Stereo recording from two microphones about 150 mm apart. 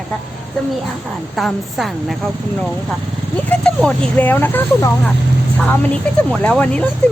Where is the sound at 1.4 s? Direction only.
Centre (ahead or behind).